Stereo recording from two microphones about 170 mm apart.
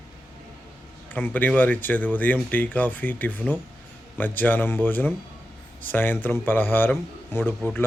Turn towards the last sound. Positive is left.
turn(degrees=10)  # may be behind; listen again after turning